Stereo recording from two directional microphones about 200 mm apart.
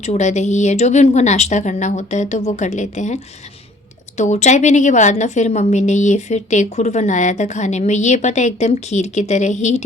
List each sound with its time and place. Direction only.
0.0 s a woman's voice: 35° left (ahead or behind)
4.2 s a woman's voice: 35° left (ahead or behind)